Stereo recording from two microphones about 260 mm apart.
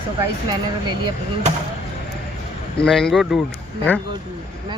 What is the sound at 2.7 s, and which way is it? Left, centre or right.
Speech, centre.